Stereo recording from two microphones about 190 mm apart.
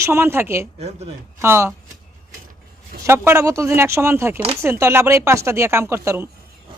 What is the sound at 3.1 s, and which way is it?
Speech, 15° right (ahead or behind).